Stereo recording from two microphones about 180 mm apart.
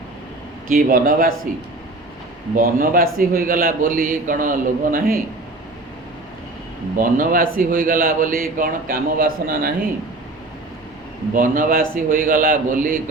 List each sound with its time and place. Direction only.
0.7 s a man's voice: 55° right (ahead or behind)
2.6 s a man's voice: 55° right (ahead or behind)
6.9 s a man's voice: 50° right (ahead or behind)
11.3 s a man's voice: 50° right (ahead or behind)